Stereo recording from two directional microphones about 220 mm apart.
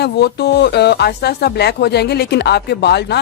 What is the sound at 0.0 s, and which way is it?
Speech, 45° left (ahead or behind).